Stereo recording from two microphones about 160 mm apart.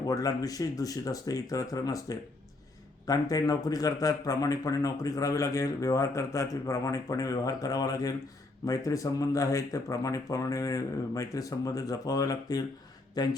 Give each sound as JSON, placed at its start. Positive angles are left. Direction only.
{"t": 0.0, "sound": "speech", "side_deg": 20}